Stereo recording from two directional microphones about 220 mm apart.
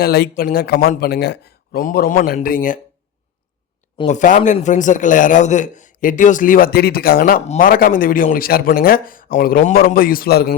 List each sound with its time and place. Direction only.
0.0 s speech: 45° left (ahead or behind)
3.9 s a man's voice: 30° left (ahead or behind)